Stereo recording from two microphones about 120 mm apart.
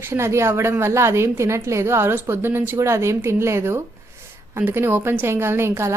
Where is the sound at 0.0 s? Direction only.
20° right (ahead or behind).